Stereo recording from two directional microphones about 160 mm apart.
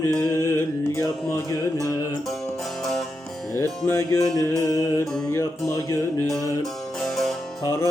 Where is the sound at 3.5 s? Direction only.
15° left (ahead or behind).